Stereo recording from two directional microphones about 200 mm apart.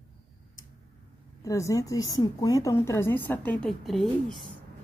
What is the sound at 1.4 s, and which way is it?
A woman's voice, 15° left (ahead or behind).